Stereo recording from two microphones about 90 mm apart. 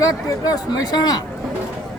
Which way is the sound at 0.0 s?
45° left (ahead or behind).